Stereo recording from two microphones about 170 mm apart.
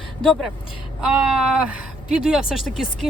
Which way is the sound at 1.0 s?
5° right (ahead or behind).